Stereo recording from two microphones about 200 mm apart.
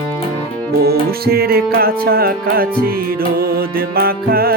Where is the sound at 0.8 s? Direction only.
50° right (ahead or behind).